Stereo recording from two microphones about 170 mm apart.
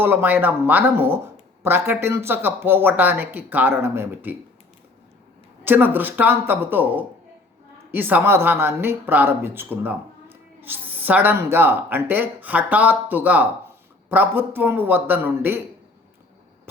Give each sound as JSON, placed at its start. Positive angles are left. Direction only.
{"t": 0.0, "sound": "a woman's voice", "side_deg": -10}
{"t": 5.6, "sound": "a woman's voice", "side_deg": -10}